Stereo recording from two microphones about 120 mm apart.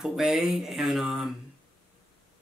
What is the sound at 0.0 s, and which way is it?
Speech, 5° right (ahead or behind).